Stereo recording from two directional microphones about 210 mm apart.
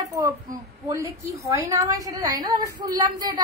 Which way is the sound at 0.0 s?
15° right (ahead or behind).